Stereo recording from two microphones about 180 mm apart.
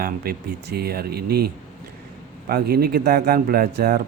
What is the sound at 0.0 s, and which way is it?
Speech, 55° right (ahead or behind).